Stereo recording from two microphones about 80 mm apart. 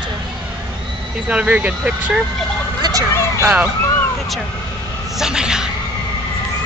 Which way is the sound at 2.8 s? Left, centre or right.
Right.